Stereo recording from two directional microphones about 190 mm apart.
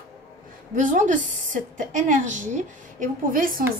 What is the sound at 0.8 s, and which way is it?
A woman's voice, 45° right (ahead or behind).